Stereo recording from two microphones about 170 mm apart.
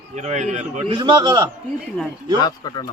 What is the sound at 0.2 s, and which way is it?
Speech, 45° right (ahead or behind).